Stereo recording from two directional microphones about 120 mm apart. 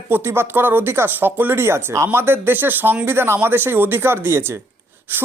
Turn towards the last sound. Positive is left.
turn(degrees=-20)  # may be behind; listen again after turning